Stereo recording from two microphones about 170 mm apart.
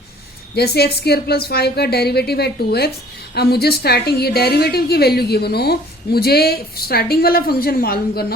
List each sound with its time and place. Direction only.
0.5 s a woman's voice: 70° left (ahead or behind)